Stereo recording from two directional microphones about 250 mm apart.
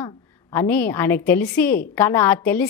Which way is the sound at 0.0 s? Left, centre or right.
Centre.